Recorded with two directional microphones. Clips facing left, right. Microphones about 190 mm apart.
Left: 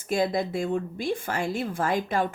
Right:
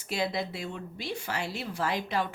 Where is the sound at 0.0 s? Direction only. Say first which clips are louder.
Left 6 dB; 50° left (ahead or behind).